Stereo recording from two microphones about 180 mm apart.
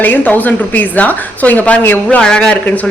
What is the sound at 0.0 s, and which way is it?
A woman's voice, 10° left (ahead or behind).